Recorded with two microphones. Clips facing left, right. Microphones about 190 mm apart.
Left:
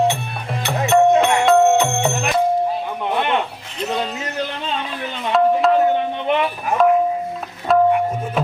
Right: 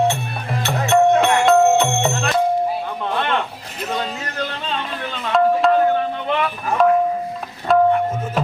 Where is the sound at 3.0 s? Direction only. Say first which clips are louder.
Left 2 dB; 15° left (ahead or behind).